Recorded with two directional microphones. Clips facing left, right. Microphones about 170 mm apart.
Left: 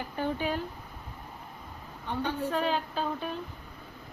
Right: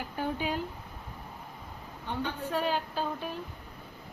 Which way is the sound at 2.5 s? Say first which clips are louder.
Left 1 dB; 5° right (ahead or behind).